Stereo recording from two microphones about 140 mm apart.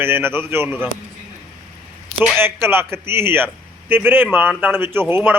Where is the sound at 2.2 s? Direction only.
15° right (ahead or behind).